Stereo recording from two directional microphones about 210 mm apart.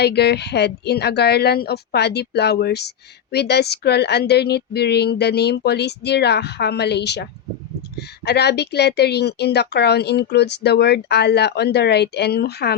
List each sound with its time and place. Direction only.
0.0 s a woman's voice: 50° left (ahead or behind)